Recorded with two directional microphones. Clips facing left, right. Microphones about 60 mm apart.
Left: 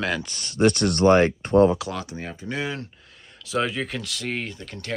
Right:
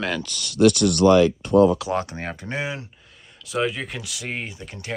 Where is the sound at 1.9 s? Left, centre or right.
Right.